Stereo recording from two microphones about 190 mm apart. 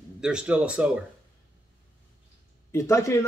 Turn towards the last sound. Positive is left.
turn(degrees=15)  # may be behind; listen again after turning